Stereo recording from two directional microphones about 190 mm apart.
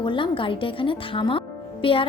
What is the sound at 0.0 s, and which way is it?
A woman's voice, 25° left (ahead or behind).